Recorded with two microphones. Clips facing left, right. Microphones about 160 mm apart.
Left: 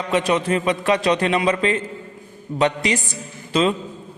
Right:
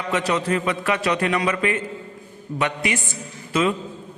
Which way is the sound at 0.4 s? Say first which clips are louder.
Left 3 dB; 25° left (ahead or behind).